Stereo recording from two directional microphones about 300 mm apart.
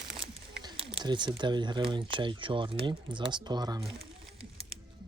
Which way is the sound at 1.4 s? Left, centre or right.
Centre.